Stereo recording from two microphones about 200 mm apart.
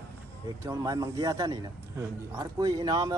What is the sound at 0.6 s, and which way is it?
A man's voice, 15° right (ahead or behind).